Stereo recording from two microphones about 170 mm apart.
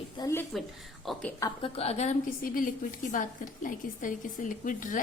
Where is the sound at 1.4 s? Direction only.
20° left (ahead or behind).